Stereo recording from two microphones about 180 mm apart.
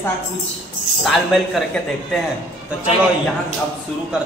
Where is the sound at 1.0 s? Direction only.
Centre (ahead or behind).